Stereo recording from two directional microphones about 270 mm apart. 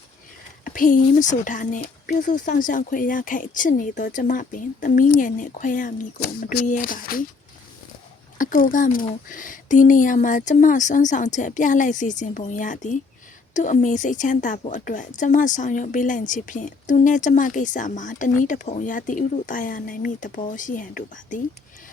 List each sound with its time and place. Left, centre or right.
0.6 s a woman's voice: left
8.4 s a woman's voice: left